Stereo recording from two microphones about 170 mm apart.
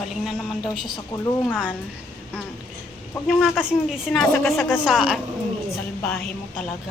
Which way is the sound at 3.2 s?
5° right (ahead or behind).